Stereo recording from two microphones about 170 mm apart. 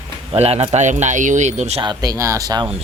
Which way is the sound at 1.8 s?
25° right (ahead or behind).